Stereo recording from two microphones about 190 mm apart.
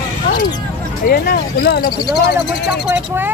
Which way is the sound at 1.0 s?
55° left (ahead or behind).